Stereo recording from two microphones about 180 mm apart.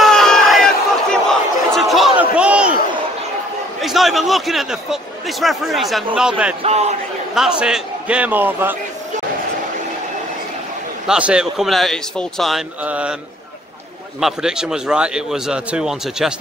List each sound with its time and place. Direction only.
0.0 s crowd: centre (ahead or behind)
3.8 s a man's voice: centre (ahead or behind)
6.6 s a man's voice: 35° right (ahead or behind)
7.3 s a man's voice: 5° right (ahead or behind)
11.1 s speech: 5° right (ahead or behind)
14.2 s speech: 5° right (ahead or behind)